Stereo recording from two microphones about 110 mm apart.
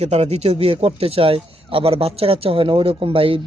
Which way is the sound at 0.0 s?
80° right.